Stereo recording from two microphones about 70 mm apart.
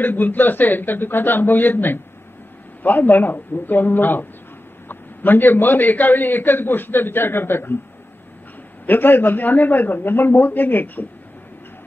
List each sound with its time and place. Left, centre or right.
0.0 s a man's voice: left
8.8 s a man's voice: left